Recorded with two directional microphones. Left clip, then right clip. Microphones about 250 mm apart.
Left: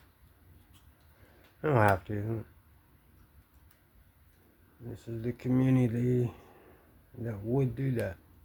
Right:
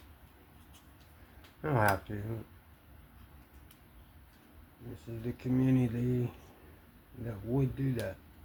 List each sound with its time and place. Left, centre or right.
1.6 s speech: left
5.2 s speech: left